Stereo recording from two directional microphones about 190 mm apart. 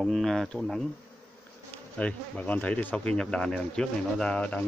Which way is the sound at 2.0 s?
5° left (ahead or behind).